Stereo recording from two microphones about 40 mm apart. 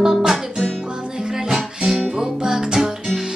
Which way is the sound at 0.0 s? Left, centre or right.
Centre.